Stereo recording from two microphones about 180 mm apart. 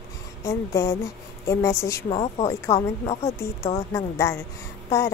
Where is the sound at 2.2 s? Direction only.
35° left (ahead or behind).